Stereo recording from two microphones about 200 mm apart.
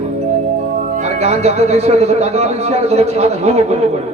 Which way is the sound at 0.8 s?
35° right (ahead or behind).